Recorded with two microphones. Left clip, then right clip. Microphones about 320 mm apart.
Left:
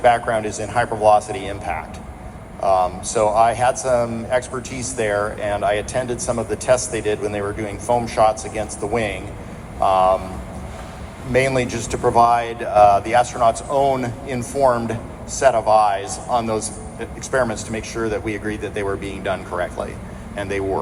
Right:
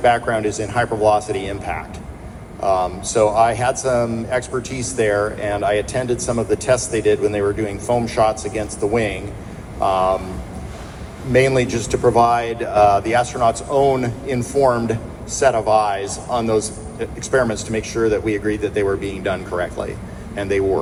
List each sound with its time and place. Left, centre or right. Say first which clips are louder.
0.0 s speech: even; left
11.3 s speech: right 3 dB; left